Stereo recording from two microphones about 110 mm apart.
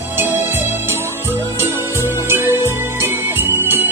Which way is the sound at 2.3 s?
20° right (ahead or behind).